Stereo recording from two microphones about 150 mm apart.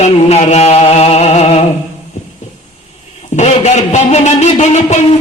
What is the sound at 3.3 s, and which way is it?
A man's voice, 50° left (ahead or behind).